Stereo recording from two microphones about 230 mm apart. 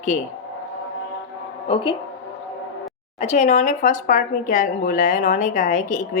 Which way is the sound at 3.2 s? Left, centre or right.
Left.